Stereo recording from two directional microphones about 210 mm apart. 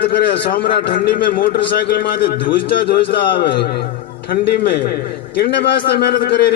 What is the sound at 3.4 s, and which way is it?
A man's voice, 50° left (ahead or behind).